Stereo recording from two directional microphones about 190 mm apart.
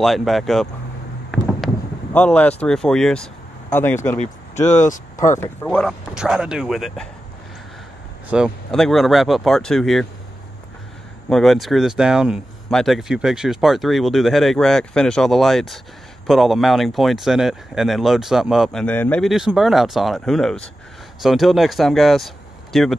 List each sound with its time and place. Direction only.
0.0 s speech: centre (ahead or behind)
1.3 s a sound: 5° left (ahead or behind)
2.1 s speech: 5° left (ahead or behind)
4.8 s speech: 45° left (ahead or behind)
5.4 s speech: 10° left (ahead or behind)
8.3 s speech: centre (ahead or behind)
11.2 s speech: centre (ahead or behind)